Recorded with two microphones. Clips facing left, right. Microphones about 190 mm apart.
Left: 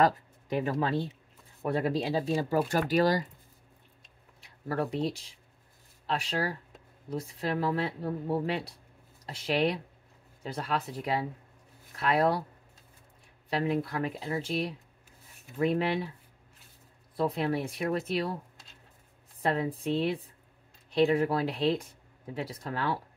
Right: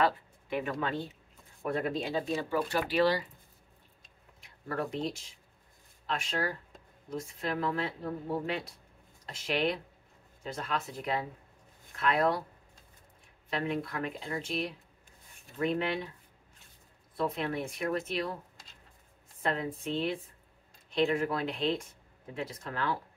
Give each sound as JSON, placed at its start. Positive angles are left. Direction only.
{"t": 0.0, "sound": "speech", "side_deg": 40}
{"t": 4.4, "sound": "speech", "side_deg": 35}
{"t": 13.5, "sound": "speech", "side_deg": 30}
{"t": 17.2, "sound": "speech", "side_deg": 35}
{"t": 19.4, "sound": "speech", "side_deg": 35}